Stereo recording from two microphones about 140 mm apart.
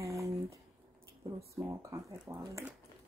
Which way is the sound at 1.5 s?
20° right (ahead or behind).